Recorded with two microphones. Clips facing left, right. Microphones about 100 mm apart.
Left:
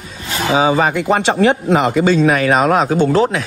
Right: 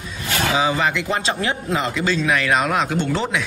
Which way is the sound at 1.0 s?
65° left (ahead or behind).